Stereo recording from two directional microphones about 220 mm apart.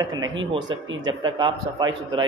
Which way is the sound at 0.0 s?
15° right (ahead or behind).